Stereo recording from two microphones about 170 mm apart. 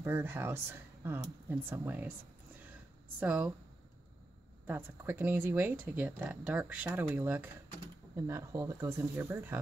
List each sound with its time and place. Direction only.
0.0 s speech: 15° right (ahead or behind)
3.2 s speech: 10° right (ahead or behind)
4.6 s speech: 10° right (ahead or behind)